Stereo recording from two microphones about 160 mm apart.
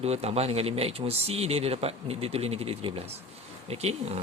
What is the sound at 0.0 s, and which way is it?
Speech, 40° right (ahead or behind).